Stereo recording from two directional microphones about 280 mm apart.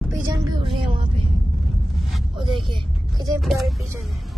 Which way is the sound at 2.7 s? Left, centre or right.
Centre.